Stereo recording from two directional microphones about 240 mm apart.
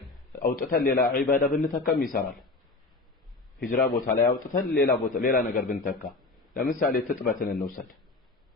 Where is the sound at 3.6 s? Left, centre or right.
Left.